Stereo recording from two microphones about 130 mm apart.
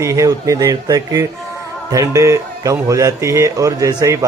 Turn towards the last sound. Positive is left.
turn(degrees=-25)  # may be behind; listen again after turning